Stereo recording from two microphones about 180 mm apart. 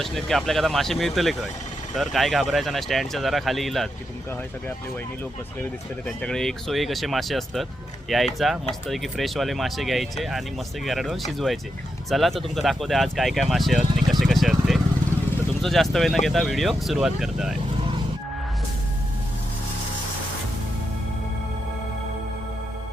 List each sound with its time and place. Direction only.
0.0 s speech: centre (ahead or behind)
6.1 s speech: 5° left (ahead or behind)